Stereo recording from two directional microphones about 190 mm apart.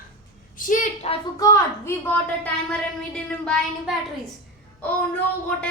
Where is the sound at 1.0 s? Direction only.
35° left (ahead or behind).